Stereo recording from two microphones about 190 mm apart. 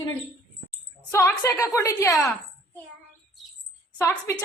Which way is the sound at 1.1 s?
10° left (ahead or behind).